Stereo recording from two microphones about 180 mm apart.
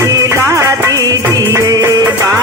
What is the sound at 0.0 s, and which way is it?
Music, 20° right (ahead or behind).